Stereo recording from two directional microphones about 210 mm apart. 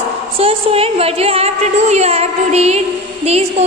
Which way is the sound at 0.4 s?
30° right (ahead or behind).